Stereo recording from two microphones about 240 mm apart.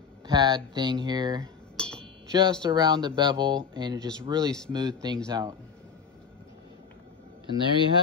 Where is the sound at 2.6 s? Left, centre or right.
Centre.